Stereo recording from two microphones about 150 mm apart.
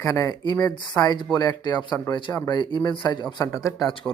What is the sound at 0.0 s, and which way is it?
Speech, 20° left (ahead or behind).